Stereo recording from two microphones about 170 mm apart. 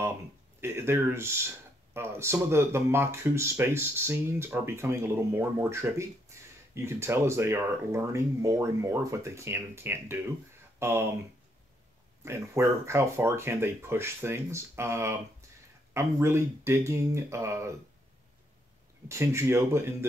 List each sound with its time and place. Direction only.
0.6 s speech: 15° right (ahead or behind)
12.3 s speech: 15° right (ahead or behind)
19.0 s speech: 15° right (ahead or behind)